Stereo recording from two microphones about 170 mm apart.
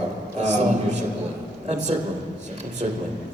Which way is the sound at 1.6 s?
45° right (ahead or behind).